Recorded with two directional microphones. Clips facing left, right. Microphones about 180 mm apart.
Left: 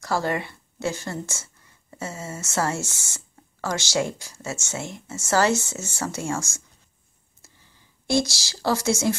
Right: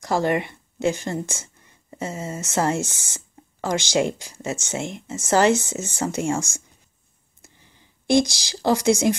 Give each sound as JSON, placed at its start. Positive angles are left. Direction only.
{"t": 0.0, "sound": "speech", "side_deg": -20}